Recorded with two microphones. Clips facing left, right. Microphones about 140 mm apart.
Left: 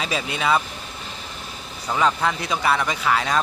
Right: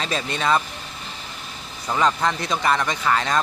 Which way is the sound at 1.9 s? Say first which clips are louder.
Even; 5° left (ahead or behind).